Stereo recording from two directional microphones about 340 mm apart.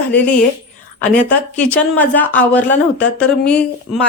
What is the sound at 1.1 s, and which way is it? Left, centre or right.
A woman's voice, centre.